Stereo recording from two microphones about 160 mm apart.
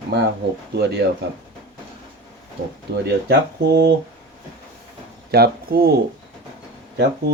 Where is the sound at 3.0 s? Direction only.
90° right.